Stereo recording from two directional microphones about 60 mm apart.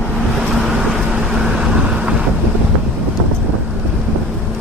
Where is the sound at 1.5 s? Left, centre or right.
Centre.